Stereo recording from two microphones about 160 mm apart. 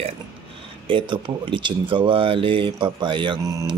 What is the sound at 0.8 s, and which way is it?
Speech, 30° right (ahead or behind).